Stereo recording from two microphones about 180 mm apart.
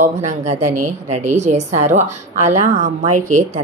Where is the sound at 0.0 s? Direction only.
40° right (ahead or behind).